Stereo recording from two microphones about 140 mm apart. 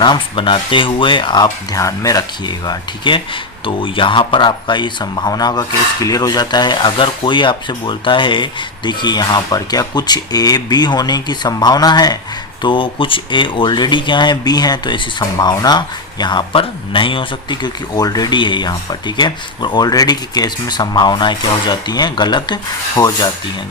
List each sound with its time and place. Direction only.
0.0 s speech: 35° left (ahead or behind)